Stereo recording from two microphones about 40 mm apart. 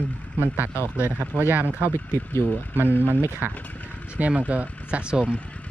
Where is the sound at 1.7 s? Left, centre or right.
Right.